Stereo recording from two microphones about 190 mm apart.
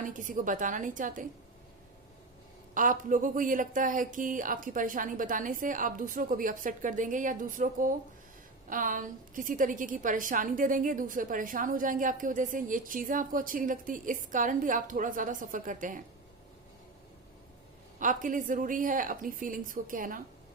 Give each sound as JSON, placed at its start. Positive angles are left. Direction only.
{"t": 0.0, "sound": "a woman's voice", "side_deg": -45}
{"t": 2.7, "sound": "a woman's voice", "side_deg": -45}
{"t": 18.0, "sound": "a woman's voice", "side_deg": -45}